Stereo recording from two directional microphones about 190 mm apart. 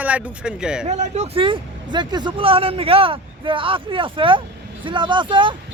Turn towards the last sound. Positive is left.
turn(degrees=-25)  # may be behind; listen again after turning